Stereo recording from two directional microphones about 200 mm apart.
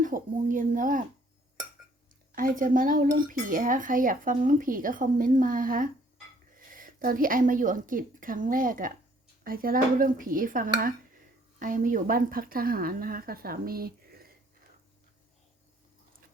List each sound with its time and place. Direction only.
0.0 s a woman's voice: 40° right (ahead or behind)
2.3 s a woman's voice: 45° right (ahead or behind)